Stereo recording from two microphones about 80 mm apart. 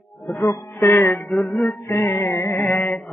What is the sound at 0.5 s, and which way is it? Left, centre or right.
Music, left.